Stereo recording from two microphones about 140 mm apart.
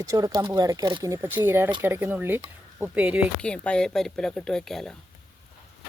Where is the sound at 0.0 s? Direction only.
25° right (ahead or behind).